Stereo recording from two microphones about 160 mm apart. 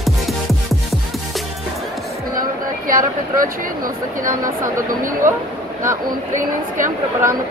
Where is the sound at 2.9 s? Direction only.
55° right (ahead or behind).